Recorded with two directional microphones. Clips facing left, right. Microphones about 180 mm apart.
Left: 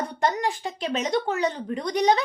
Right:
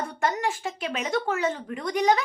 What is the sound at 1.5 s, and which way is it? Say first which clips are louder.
Speech: left 1 dB; 30° left (ahead or behind).